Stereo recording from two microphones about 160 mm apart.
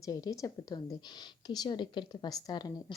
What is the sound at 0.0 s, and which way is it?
A woman's voice, 20° left (ahead or behind).